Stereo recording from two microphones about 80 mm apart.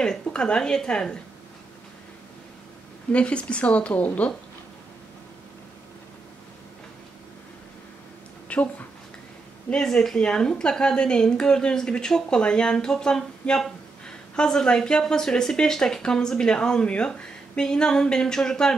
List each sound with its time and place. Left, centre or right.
0.0 s a woman's voice: centre
3.1 s a woman's voice: centre
8.5 s a woman's voice: centre